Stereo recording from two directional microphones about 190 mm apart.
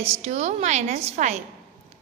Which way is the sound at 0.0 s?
35° right (ahead or behind).